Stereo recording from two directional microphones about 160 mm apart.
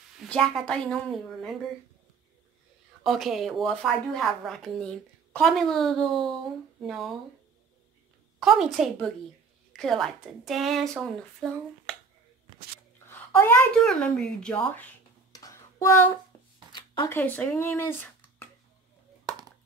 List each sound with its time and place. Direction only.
0.2 s speech: 5° left (ahead or behind)
3.0 s speech: centre (ahead or behind)
8.4 s speech: centre (ahead or behind)
11.9 s finger snapping: 5° left (ahead or behind)
13.1 s a sound: 15° left (ahead or behind)
13.7 s speech: 5° left (ahead or behind)
15.3 s a sound: 20° left (ahead or behind)
17.1 s speech: 10° left (ahead or behind)